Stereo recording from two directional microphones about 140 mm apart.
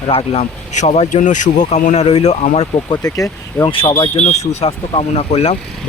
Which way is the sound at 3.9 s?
45° left (ahead or behind).